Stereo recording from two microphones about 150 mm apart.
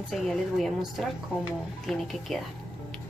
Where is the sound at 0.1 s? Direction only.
Centre (ahead or behind).